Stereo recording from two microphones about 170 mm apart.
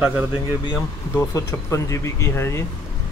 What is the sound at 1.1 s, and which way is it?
Speech, 15° left (ahead or behind).